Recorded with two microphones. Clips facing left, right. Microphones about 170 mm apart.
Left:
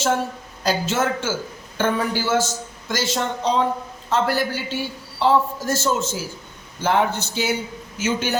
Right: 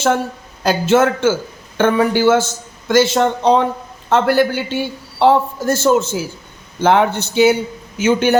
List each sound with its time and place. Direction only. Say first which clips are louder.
0.6 s a man's voice: right 8 dB; 60° right (ahead or behind)